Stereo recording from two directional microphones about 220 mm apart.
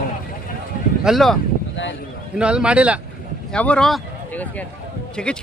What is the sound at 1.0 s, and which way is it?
Speech, centre (ahead or behind).